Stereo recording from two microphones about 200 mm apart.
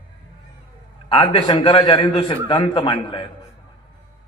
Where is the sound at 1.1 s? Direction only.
25° left (ahead or behind).